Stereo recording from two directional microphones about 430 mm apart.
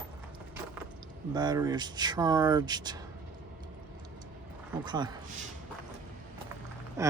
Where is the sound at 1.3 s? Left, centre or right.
Centre.